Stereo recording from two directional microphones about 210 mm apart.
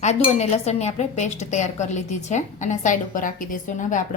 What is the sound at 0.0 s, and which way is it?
Speech, 30° left (ahead or behind).